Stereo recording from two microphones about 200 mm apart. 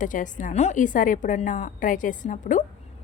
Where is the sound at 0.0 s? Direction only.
40° left (ahead or behind).